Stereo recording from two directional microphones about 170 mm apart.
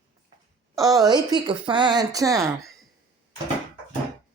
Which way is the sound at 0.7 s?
20° right (ahead or behind).